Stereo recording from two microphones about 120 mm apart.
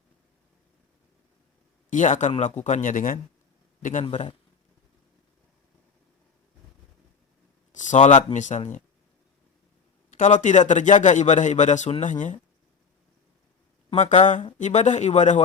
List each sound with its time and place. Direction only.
1.9 s a man's voice: 90° left
2.4 s a man's voice: 80° left
4.0 s a man's voice: 45° left (ahead or behind)
7.7 s speech: 90° left
10.1 s a man's voice: 85° left
13.9 s a man's voice: 85° left